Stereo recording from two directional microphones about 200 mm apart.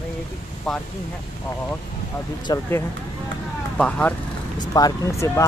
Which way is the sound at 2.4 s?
20° left (ahead or behind).